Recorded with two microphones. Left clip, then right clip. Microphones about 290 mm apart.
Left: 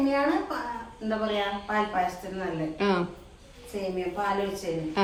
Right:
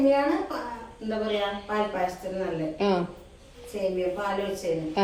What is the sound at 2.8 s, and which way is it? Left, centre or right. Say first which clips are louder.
Speech: right 1 dB; left.